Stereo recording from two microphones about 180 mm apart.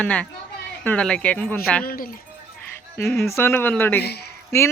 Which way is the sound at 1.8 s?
55° left (ahead or behind).